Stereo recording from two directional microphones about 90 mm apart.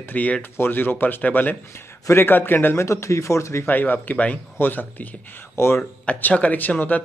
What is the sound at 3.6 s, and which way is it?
Speech, 20° left (ahead or behind).